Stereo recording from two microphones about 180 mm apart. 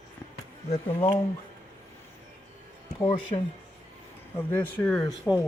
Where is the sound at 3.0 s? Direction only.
30° left (ahead or behind).